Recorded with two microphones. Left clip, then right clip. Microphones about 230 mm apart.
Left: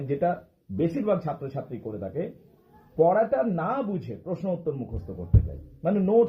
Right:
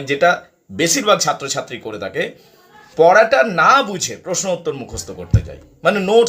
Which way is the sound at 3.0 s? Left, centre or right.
Right.